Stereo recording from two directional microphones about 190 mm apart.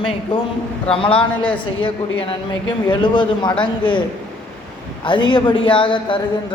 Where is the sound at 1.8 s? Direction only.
25° left (ahead or behind).